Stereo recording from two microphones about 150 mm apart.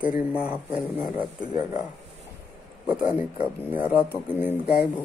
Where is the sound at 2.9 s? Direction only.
10° right (ahead or behind).